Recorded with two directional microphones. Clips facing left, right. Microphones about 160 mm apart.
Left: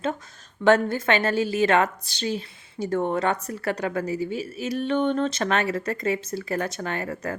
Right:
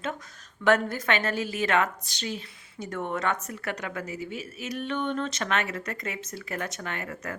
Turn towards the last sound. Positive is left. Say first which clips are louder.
# left 6 dB
turn(degrees=35)  # may be behind; listen again after turning